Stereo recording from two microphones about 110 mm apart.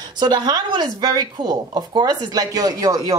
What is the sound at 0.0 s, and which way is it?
Speech, 40° right (ahead or behind).